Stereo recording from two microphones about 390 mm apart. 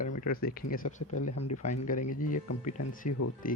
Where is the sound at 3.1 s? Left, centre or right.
Left.